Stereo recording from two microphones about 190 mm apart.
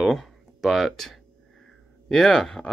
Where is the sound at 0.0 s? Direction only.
Centre (ahead or behind).